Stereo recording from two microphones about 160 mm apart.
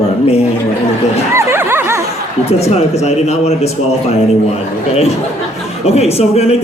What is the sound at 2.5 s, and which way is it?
Speech, 40° left (ahead or behind).